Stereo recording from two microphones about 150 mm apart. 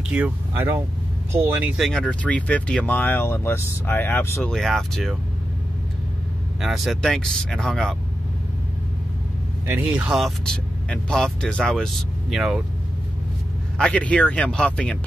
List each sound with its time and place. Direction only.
0.1 s speech: 10° right (ahead or behind)
1.8 s speech: 5° left (ahead or behind)
6.6 s speech: centre (ahead or behind)
9.7 s speech: 10° right (ahead or behind)
13.7 s speech: 5° left (ahead or behind)